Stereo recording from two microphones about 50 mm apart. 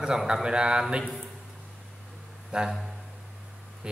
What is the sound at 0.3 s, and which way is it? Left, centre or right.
Speech, centre.